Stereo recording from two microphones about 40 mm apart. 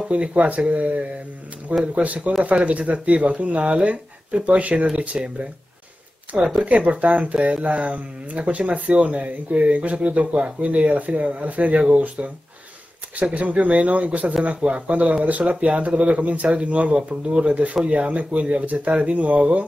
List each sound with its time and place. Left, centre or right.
0.1 s speech: right
2.0 s speech: right
6.4 s speech: right
6.7 s speech: right